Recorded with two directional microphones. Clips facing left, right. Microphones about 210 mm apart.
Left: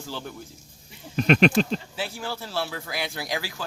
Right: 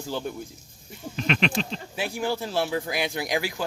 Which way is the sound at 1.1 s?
45° left (ahead or behind).